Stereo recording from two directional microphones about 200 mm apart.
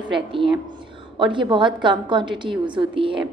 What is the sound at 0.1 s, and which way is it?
A woman's voice, 25° right (ahead or behind).